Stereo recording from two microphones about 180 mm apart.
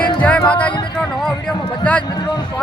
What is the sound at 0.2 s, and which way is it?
Music, 5° left (ahead or behind).